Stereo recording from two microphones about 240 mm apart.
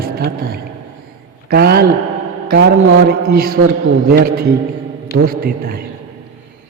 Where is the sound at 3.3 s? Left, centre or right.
Right.